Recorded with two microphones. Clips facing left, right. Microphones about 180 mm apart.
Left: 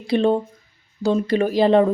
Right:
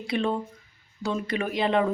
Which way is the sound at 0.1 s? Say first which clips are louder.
Left 9 dB; 30° left (ahead or behind).